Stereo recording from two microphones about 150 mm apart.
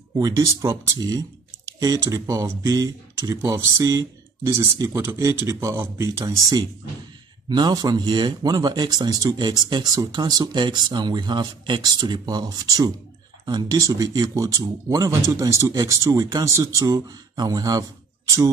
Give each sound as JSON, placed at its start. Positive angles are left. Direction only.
{"t": 0.2, "sound": "speech", "side_deg": -20}